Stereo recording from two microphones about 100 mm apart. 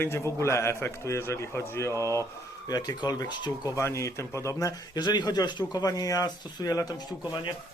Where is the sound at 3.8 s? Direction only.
30° left (ahead or behind).